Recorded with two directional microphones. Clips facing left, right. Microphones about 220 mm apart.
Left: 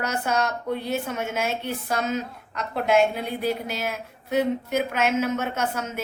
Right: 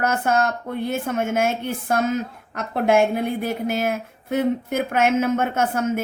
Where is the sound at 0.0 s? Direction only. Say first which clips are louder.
Right 4 dB; 50° right (ahead or behind).